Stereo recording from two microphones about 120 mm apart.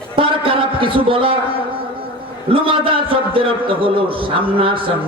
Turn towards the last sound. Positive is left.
turn(degrees=-45)  # may be behind; listen again after turning